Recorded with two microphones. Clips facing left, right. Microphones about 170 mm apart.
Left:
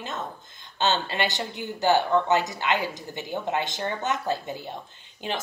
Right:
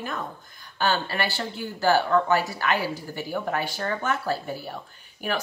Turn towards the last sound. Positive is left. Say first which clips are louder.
# right 2 dB
turn(degrees=20)  # may be behind; listen again after turning